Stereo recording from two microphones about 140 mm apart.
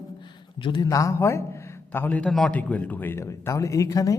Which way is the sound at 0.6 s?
35° left (ahead or behind).